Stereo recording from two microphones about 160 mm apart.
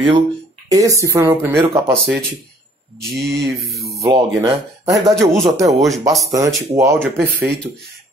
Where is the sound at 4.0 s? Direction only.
20° right (ahead or behind).